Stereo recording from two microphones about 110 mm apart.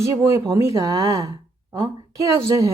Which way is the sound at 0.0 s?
25° right (ahead or behind).